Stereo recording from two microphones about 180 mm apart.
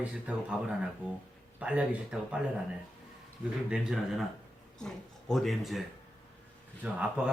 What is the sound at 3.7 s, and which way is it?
A man's voice, 5° right (ahead or behind).